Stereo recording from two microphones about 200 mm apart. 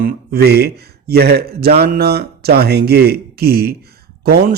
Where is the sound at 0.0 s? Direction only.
45° right (ahead or behind).